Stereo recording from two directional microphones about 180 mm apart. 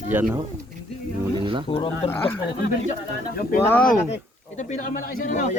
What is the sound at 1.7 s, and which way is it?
Speech, 25° left (ahead or behind).